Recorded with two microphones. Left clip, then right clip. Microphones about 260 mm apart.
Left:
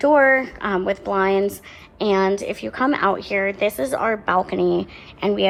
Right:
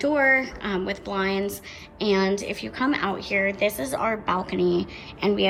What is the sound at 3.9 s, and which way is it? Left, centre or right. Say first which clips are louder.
Speech: left 5 dB; left.